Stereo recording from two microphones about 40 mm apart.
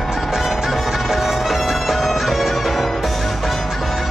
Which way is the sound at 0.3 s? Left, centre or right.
Centre.